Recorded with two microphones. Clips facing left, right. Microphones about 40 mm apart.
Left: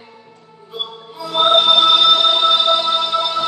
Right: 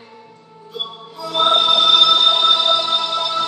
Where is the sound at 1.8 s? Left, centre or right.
Left.